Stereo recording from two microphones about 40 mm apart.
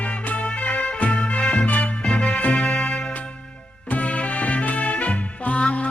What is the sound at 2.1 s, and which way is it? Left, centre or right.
Music, left.